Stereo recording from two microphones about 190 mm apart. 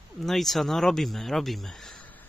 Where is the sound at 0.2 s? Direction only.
Centre (ahead or behind).